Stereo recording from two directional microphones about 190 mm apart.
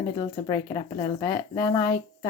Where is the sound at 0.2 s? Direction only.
20° left (ahead or behind).